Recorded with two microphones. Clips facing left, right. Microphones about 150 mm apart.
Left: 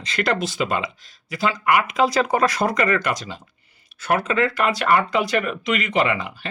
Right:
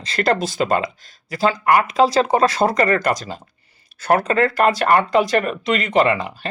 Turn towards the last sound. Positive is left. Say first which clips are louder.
# right 4 dB
turn(degrees=-40)  # may be behind; listen again after turning